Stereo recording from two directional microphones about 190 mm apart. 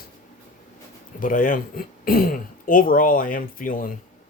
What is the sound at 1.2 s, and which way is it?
Speech, 45° left (ahead or behind).